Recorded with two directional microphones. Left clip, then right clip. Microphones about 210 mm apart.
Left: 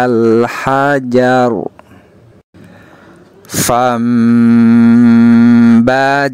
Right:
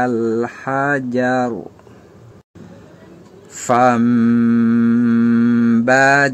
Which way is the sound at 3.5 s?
40° left (ahead or behind).